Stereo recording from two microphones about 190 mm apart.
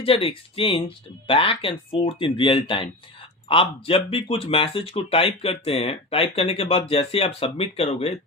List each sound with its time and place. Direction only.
0.0 s speech: 30° left (ahead or behind)